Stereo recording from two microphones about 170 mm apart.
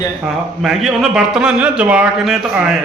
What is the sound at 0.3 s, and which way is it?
A man's voice, centre (ahead or behind).